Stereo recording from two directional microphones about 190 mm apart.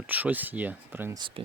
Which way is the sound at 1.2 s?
25° right (ahead or behind).